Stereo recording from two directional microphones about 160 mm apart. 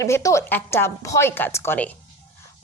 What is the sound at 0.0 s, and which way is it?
A woman's voice, 20° left (ahead or behind).